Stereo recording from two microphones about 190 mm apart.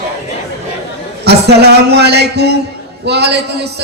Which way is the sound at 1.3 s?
60° right (ahead or behind).